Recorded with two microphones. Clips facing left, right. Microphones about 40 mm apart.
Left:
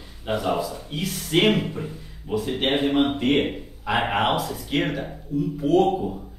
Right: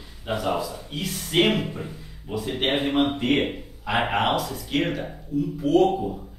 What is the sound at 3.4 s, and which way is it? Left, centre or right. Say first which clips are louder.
Speech: left 1 dB; centre.